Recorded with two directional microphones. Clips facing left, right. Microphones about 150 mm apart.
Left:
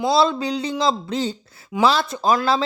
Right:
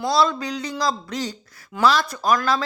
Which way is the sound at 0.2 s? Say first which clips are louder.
Left 2 dB; 25° left (ahead or behind).